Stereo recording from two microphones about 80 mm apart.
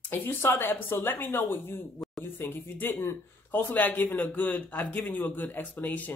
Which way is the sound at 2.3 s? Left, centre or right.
Left.